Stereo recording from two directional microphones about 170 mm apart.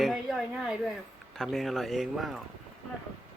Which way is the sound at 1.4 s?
Centre (ahead or behind).